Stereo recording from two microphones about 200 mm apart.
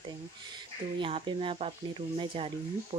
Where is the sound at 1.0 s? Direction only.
25° right (ahead or behind).